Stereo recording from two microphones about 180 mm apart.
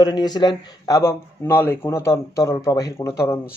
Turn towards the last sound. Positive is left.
turn(degrees=15)  # may be behind; listen again after turning